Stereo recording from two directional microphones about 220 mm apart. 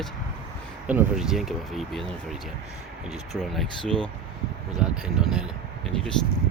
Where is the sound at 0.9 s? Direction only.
5° right (ahead or behind).